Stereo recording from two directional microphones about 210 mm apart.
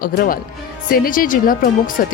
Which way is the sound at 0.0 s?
40° left (ahead or behind).